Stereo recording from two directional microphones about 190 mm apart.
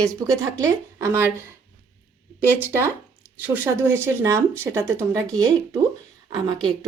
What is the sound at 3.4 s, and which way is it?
Speech, 10° right (ahead or behind).